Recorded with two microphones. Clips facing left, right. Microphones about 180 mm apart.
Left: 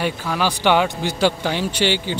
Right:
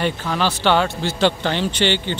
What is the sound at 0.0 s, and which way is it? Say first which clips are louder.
A man's voice: right 1 dB; 10° left (ahead or behind).